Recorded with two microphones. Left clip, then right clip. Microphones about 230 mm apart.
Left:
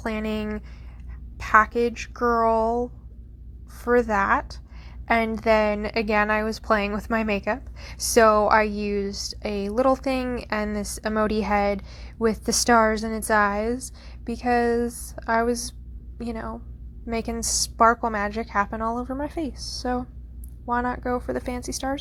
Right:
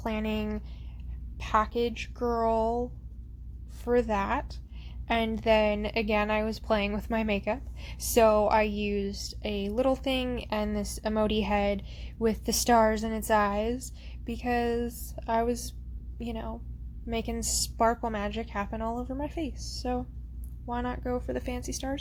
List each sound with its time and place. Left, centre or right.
0.0 s a woman's voice: centre
10.2 s a woman's voice: centre
10.5 s a woman's voice: centre